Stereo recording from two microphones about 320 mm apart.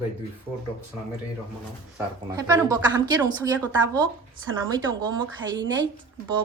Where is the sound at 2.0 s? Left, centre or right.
Centre.